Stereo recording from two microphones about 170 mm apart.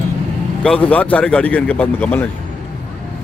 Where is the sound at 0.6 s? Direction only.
5° left (ahead or behind).